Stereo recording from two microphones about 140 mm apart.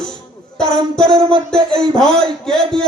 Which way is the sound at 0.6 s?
5° left (ahead or behind).